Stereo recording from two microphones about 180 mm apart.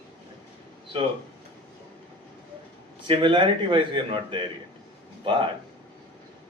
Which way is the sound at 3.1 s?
25° right (ahead or behind).